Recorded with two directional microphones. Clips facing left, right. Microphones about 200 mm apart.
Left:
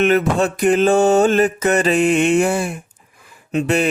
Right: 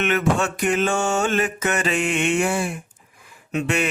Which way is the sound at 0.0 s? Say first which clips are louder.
Left 5 dB; 35° left (ahead or behind).